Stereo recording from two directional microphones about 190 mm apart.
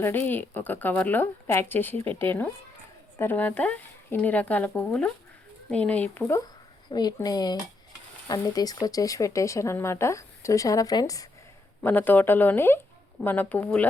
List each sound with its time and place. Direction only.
0.0 s speech: 10° left (ahead or behind)